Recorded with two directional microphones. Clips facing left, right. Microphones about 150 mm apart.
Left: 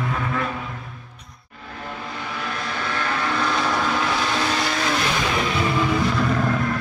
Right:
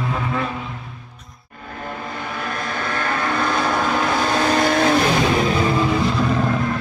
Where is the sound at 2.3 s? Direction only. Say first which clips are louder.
Right 2 dB; 50° right (ahead or behind).